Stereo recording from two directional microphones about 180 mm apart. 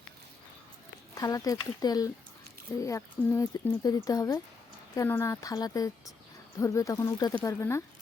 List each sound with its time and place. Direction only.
1.1 s speech: 20° left (ahead or behind)